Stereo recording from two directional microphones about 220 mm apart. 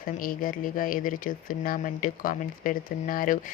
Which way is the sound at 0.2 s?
40° left (ahead or behind).